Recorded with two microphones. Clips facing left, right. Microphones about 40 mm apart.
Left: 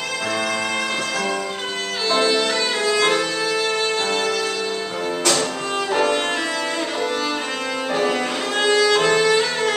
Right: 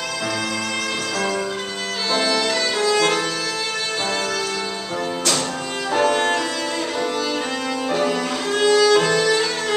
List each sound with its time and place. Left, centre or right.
2.1 s music: centre
5.9 s violin: centre
7.9 s violin: centre